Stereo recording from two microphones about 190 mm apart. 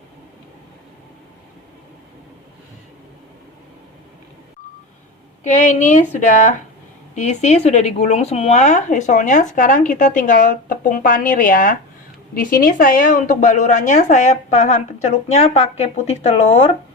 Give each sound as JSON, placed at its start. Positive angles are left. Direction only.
{"t": 5.4, "sound": "speech", "side_deg": 40}